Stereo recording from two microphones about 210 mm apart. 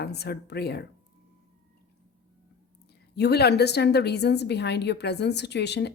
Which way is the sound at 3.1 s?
50° left (ahead or behind).